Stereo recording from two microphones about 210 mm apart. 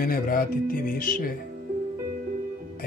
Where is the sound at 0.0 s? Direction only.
45° left (ahead or behind).